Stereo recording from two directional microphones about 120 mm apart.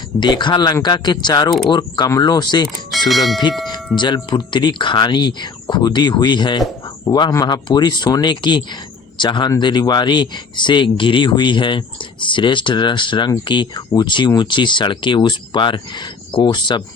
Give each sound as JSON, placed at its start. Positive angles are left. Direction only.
{"t": 0.2, "sound": "speech", "side_deg": 40}
{"t": 3.1, "sound": "speech", "side_deg": 0}
{"t": 3.9, "sound": "speech", "side_deg": 40}